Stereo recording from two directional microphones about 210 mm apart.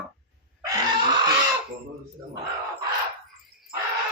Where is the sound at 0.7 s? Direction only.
20° right (ahead or behind).